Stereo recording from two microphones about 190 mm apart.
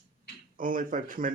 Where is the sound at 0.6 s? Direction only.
45° right (ahead or behind).